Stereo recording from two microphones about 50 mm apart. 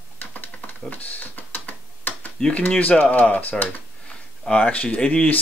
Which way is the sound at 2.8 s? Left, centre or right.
Left.